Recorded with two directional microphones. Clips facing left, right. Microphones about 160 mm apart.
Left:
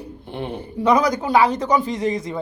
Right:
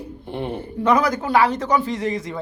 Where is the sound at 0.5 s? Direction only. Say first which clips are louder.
Left 1 dB; 15° left (ahead or behind).